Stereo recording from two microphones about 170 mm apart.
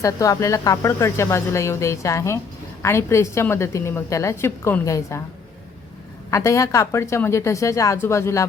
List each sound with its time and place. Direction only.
0.0 s speech: 20° left (ahead or behind)
6.3 s speech: 20° left (ahead or behind)